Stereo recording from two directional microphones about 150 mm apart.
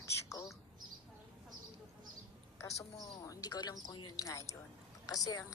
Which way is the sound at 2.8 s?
20° left (ahead or behind).